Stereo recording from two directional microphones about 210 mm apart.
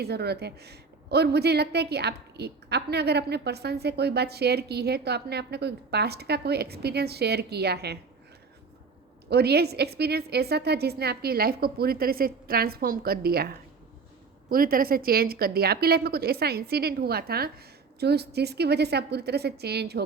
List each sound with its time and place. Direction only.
0.0 s a woman's voice: 50° right (ahead or behind)
9.3 s a woman's voice: 50° right (ahead or behind)